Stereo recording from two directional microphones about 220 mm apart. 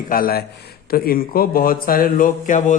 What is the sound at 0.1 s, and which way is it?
Speech, 40° left (ahead or behind).